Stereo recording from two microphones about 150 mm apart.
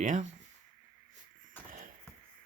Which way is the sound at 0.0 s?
55° right (ahead or behind).